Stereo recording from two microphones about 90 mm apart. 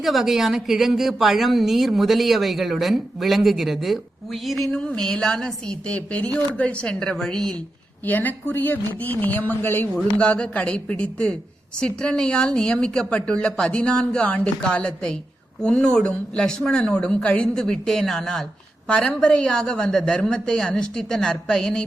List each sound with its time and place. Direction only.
0.0 s a woman's voice: centre (ahead or behind)
8.0 s speech: 20° left (ahead or behind)
10.2 s a woman's voice: 15° left (ahead or behind)